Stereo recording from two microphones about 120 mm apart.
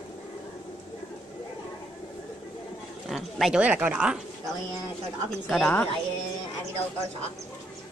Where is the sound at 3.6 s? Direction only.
15° right (ahead or behind).